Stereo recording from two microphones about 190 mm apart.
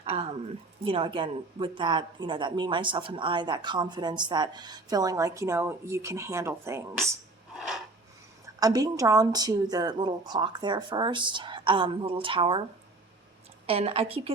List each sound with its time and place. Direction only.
0.0 s a woman's voice: 30° right (ahead or behind); by 6.8 s 15° right (ahead or behind)
7.5 s a sound: centre (ahead or behind)
8.5 s speech: 20° right (ahead or behind)
13.7 s a woman's voice: 30° right (ahead or behind)